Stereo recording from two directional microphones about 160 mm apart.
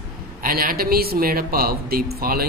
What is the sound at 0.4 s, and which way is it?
A woman's voice, 65° right (ahead or behind).